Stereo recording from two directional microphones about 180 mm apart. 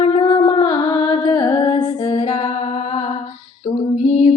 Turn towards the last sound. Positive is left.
turn(degrees=40)  # may be behind; listen again after turning